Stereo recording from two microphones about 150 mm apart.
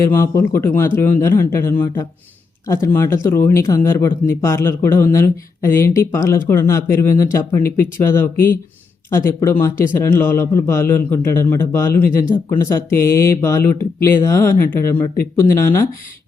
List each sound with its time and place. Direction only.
0.0 s a man's voice: 20° left (ahead or behind)